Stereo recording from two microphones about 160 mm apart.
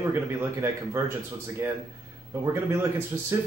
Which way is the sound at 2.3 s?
15° right (ahead or behind).